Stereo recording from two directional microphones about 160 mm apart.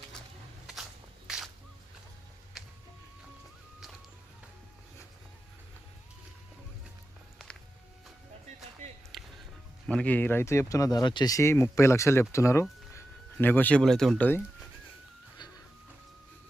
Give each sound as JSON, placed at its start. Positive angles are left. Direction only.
{"t": 1.3, "sound": "a sound", "side_deg": -5}
{"t": 2.5, "sound": "music", "side_deg": 0}
{"t": 9.1, "sound": "music", "side_deg": 0}
{"t": 9.8, "sound": "speech", "side_deg": 5}